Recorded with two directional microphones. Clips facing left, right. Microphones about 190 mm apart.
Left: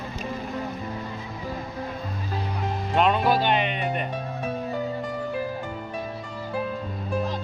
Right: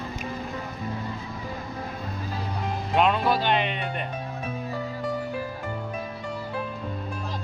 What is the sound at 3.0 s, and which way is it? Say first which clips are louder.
Speech: left 1 dB; centre (ahead or behind).